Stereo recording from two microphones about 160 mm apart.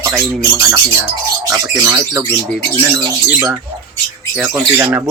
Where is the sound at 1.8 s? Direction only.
20° right (ahead or behind).